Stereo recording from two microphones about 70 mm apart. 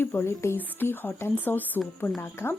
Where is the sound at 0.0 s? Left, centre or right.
Left.